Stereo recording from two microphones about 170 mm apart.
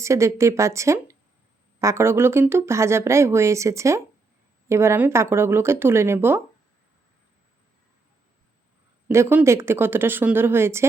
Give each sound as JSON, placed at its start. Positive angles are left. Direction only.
{"t": 0.0, "sound": "speech", "side_deg": -15}
{"t": 9.0, "sound": "speech", "side_deg": -15}